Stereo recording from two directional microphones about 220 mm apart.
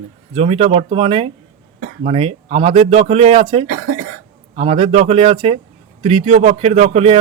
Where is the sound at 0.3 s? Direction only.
25° right (ahead or behind).